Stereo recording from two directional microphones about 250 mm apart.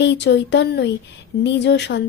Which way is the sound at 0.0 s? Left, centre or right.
Left.